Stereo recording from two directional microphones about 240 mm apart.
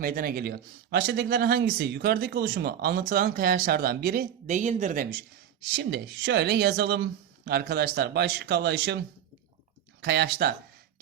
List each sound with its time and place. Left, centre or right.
0.0 s speech: right
5.7 s speech: right
10.0 s speech: right